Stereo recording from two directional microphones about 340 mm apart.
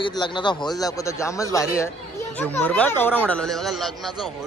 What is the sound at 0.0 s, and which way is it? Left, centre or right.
A man's voice, centre.